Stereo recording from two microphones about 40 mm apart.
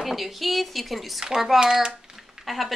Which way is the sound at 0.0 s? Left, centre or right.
Centre.